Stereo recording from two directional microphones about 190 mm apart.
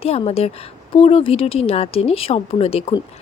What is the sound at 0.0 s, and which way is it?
Speech, 30° left (ahead or behind).